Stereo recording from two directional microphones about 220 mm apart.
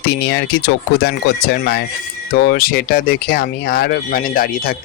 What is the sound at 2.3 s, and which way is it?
Speech, 45° left (ahead or behind).